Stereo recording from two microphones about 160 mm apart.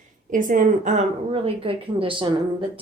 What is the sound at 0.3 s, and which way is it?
Speech, 55° right (ahead or behind).